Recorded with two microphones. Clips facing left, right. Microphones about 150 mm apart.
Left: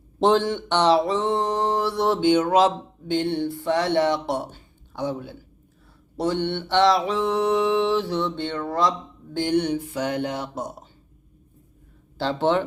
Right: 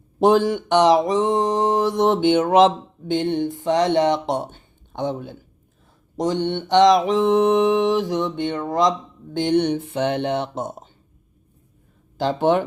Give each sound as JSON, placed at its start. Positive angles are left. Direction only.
{"t": 0.2, "sound": "mantra", "side_deg": -10}
{"t": 4.9, "sound": "a man's voice", "side_deg": -20}
{"t": 6.1, "sound": "mantra", "side_deg": -15}
{"t": 12.1, "sound": "mantra", "side_deg": -15}